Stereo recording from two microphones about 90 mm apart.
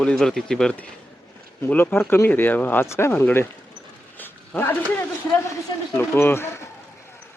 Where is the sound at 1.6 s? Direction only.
25° left (ahead or behind).